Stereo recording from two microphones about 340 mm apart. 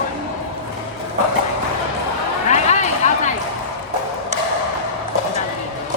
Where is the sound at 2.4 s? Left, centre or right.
Centre.